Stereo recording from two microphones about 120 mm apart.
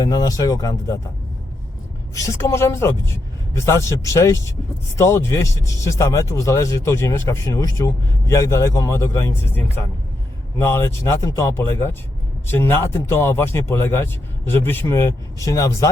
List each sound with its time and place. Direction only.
0.0 s speech: 30° left (ahead or behind)
2.1 s speech: 25° left (ahead or behind)